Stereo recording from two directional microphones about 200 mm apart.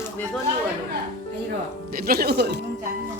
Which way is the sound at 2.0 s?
50° right (ahead or behind).